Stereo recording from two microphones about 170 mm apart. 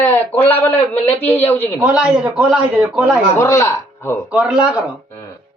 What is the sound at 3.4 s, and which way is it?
Speech, 15° left (ahead or behind).